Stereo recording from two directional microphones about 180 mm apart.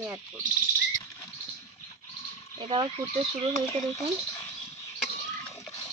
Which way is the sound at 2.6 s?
30° right (ahead or behind).